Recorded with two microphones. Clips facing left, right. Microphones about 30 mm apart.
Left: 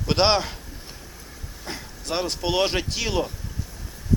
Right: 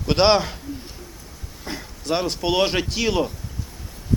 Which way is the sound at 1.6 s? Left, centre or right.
Centre.